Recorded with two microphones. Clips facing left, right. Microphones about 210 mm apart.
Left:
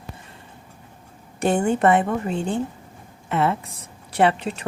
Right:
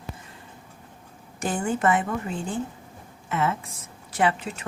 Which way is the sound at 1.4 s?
65° left (ahead or behind).